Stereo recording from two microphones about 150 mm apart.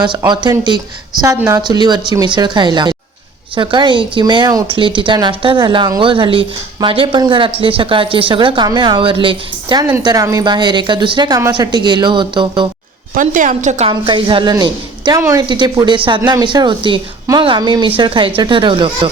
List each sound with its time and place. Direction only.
0.3 s a woman's voice: 30° right (ahead or behind)
13.1 s a woman's voice: 60° right (ahead or behind)
14.0 s a woman's voice: 35° right (ahead or behind)